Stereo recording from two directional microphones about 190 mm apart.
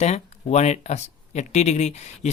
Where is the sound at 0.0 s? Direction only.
35° left (ahead or behind).